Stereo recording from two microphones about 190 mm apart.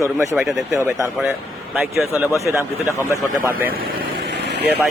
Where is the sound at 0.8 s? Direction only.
15° right (ahead or behind).